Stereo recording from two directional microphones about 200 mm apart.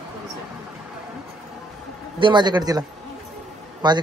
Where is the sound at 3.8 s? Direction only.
20° right (ahead or behind).